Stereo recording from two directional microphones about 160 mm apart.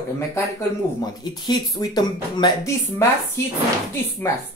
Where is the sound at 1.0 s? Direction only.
25° left (ahead or behind).